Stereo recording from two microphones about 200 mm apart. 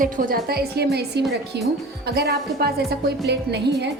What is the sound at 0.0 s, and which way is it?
A woman's voice, 45° right (ahead or behind).